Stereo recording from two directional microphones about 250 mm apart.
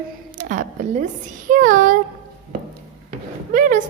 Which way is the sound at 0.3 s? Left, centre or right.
Right.